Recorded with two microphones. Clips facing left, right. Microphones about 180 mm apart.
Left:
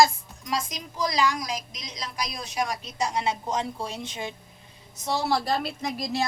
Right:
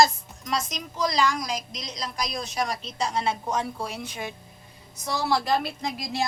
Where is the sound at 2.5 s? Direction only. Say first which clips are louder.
Left 3 dB; 15° left (ahead or behind).